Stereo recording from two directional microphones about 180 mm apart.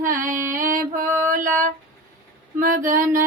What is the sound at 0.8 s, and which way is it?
Female singing, 50° right (ahead or behind).